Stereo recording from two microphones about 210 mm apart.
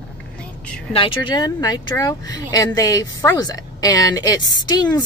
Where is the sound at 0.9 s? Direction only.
25° left (ahead or behind).